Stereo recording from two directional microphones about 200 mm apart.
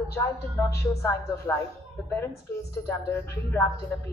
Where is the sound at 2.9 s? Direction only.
15° left (ahead or behind).